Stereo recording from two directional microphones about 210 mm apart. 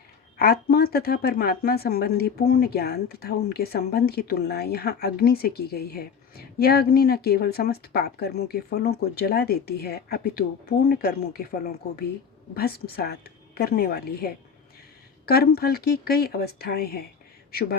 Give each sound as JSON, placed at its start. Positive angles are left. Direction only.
{"t": 0.3, "sound": "speech", "side_deg": 45}
{"t": 15.3, "sound": "speech", "side_deg": 45}